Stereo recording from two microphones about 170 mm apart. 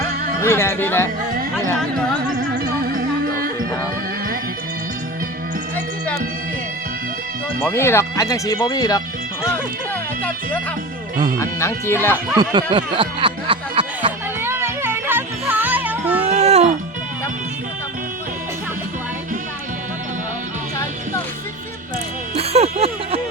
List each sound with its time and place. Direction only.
0.4 s speech: 15° left (ahead or behind)
1.5 s a sound: 15° left (ahead or behind)
2.6 s music: 60° right (ahead or behind)
7.6 s speech: 15° left (ahead or behind)
11.3 s speech: 15° left (ahead or behind)
12.5 s a sound: 30° right (ahead or behind)
14.4 s music: 15° right (ahead or behind)
16.3 s music: 40° right (ahead or behind)
22.4 s music: 35° right (ahead or behind)